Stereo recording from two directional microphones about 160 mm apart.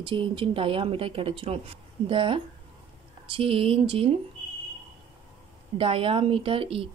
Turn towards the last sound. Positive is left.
turn(degrees=-35)  # may be behind; listen again after turning